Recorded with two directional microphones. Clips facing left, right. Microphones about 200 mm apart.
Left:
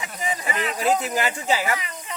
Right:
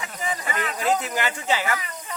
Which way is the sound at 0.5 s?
20° left (ahead or behind).